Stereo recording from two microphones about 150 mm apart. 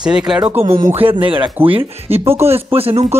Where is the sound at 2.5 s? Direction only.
40° right (ahead or behind).